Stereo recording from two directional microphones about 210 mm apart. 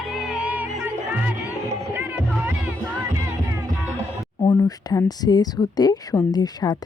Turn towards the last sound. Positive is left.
turn(degrees=20)  # may be behind; listen again after turning